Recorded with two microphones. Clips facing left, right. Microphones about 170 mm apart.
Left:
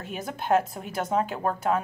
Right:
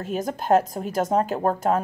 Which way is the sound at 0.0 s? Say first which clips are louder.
Right 6 dB; 40° right (ahead or behind).